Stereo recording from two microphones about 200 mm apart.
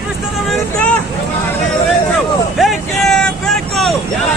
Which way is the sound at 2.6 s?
Centre (ahead or behind).